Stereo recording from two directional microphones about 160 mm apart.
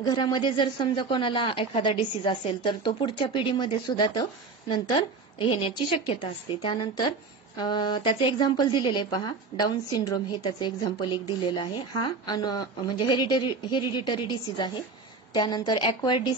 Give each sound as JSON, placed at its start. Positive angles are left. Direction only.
{"t": 0.0, "sound": "a woman's voice", "side_deg": 25}